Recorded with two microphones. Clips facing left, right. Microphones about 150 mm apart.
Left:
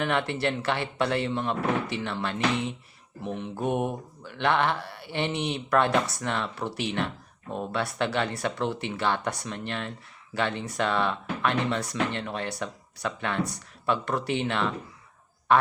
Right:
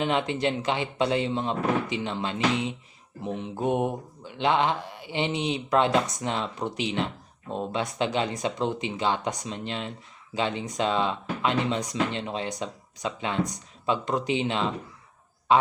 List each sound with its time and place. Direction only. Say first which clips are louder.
0.0 s speech: right 1 dB; 15° right (ahead or behind)